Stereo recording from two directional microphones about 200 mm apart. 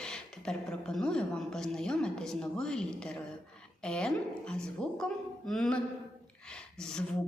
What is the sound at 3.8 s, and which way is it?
A woman's voice, 5° left (ahead or behind).